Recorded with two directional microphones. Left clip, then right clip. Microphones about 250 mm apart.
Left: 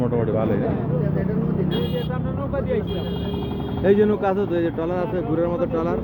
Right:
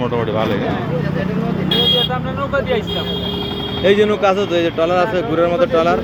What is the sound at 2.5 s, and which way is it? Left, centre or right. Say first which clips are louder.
Speech: right 6 dB; centre.